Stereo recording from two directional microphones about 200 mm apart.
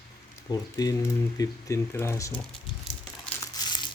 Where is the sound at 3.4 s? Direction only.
20° left (ahead or behind).